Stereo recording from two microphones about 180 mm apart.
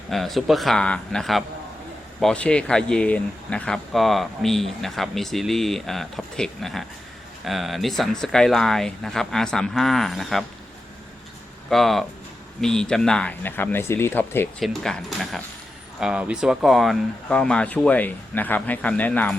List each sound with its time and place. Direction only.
0.1 s speech: centre (ahead or behind)
11.7 s speech: centre (ahead or behind)